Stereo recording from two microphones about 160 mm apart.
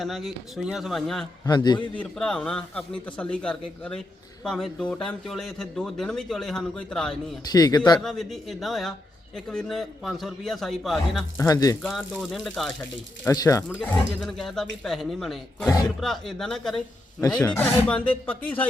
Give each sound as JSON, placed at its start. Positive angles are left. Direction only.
{"t": 0.0, "sound": "a man's voice", "side_deg": 0}
{"t": 1.5, "sound": "speech", "side_deg": 25}
{"t": 2.0, "sound": "a man's voice", "side_deg": 5}
{"t": 7.4, "sound": "speech", "side_deg": 25}
{"t": 8.0, "sound": "a man's voice", "side_deg": 0}
{"t": 11.3, "sound": "speech", "side_deg": 20}
{"t": 11.8, "sound": "a man's voice", "side_deg": 0}
{"t": 13.2, "sound": "speech", "side_deg": 20}
{"t": 13.8, "sound": "a man's voice", "side_deg": 5}